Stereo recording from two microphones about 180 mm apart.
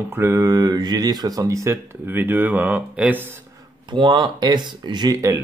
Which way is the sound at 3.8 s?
25° right (ahead or behind).